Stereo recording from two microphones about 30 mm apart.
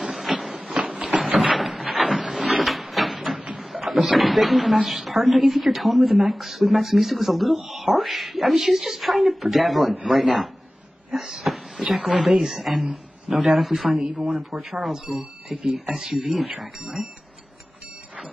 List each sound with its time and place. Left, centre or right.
0.0 s a sound: centre
3.5 s speech: centre
14.1 s speech: right
14.5 s speech: centre